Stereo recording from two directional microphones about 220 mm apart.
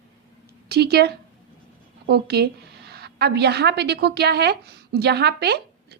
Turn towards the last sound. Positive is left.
turn(degrees=-50)  # may be behind; listen again after turning